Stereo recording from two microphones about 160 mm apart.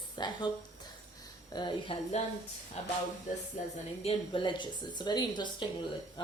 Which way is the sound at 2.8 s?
40° left (ahead or behind).